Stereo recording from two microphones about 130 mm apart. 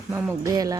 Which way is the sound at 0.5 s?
30° right (ahead or behind).